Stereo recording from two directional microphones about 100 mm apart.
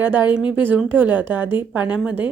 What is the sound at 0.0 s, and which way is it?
A woman's voice, 20° right (ahead or behind).